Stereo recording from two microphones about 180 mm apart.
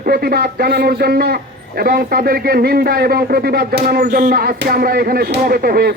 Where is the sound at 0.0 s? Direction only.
60° right (ahead or behind).